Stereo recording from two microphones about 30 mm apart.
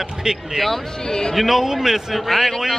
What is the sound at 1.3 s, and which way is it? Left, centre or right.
Speech, centre.